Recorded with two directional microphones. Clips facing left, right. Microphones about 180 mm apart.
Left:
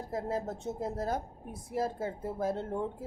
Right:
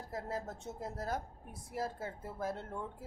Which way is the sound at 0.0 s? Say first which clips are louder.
Left 6 dB; 25° left (ahead or behind).